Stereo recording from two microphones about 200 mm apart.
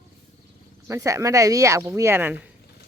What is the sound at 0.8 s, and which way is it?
Speech, 15° right (ahead or behind).